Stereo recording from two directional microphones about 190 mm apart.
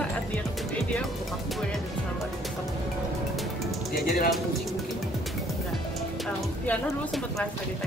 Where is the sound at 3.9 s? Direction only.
50° left (ahead or behind).